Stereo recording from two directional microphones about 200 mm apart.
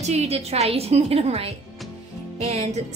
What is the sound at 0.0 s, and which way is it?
Speech, 30° right (ahead or behind).